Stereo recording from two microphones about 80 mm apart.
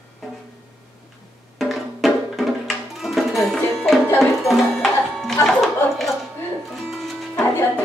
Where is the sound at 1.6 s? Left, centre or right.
Centre.